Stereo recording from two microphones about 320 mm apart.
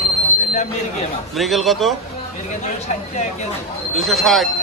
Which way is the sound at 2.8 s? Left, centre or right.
Left.